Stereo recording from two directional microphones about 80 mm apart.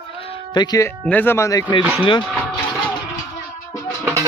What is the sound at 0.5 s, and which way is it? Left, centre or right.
Speech, left.